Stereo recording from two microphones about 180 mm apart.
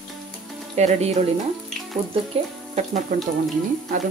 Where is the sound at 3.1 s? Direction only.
50° right (ahead or behind).